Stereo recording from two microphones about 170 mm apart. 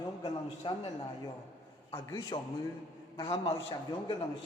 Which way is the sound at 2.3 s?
30° left (ahead or behind).